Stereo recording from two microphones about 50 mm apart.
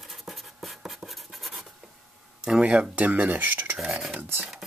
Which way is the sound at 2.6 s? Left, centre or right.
Right.